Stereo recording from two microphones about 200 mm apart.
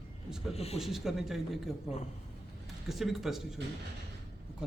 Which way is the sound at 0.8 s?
Centre (ahead or behind).